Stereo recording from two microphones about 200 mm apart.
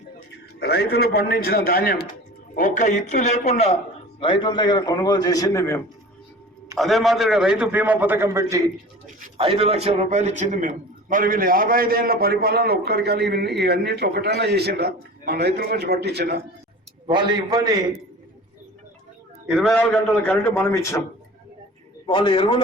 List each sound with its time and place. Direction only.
0.6 s a man's voice: 55° left (ahead or behind); by 5.8 s 15° left (ahead or behind)
6.7 s a man's voice: centre (ahead or behind); by 8.7 s 15° right (ahead or behind)
9.4 s a man's voice: 25° right (ahead or behind); by 16.4 s 55° right (ahead or behind)
17.1 s a man's voice: 20° right (ahead or behind)
19.5 s a man's voice: 5° left (ahead or behind)
22.0 s a man's voice: 25° left (ahead or behind)